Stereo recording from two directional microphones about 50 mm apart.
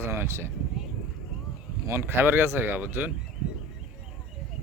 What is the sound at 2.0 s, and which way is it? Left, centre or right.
Speech, right.